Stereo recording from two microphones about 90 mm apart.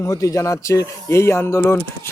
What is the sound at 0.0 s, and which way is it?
Speech, 40° left (ahead or behind).